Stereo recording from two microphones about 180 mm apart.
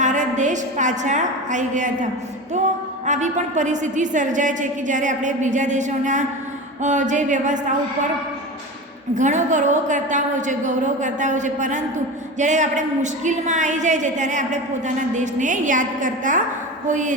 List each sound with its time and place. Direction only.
0.0 s a woman's voice: 40° right (ahead or behind)
3.1 s a woman's voice: 40° right (ahead or behind)
9.1 s a woman's voice: 45° right (ahead or behind)